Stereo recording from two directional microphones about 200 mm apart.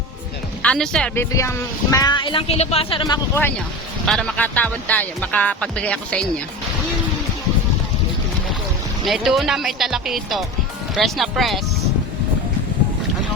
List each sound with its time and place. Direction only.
0.6 s speech: 5° left (ahead or behind); by 3.0 s 30° left (ahead or behind)
3.0 s speech: 15° left (ahead or behind)
4.0 s speech: 5° left (ahead or behind)
9.0 s speech: centre (ahead or behind)